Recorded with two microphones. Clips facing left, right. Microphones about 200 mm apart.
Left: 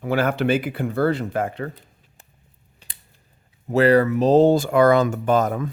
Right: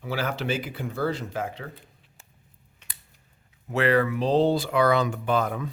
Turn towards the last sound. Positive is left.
turn(degrees=45)  # may be behind; listen again after turning